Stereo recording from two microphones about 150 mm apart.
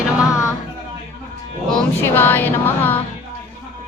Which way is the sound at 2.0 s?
15° left (ahead or behind).